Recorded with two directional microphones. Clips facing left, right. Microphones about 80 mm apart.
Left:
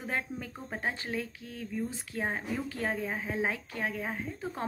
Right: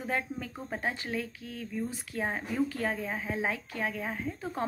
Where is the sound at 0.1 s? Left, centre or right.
Left.